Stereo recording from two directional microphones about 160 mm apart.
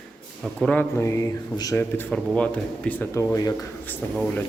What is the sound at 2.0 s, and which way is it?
Speech, 5° left (ahead or behind).